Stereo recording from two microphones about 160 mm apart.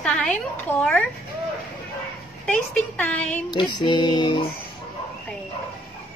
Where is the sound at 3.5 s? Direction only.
30° left (ahead or behind).